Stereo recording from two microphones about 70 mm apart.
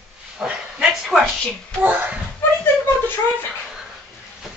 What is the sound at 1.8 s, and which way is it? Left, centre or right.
Speech, centre.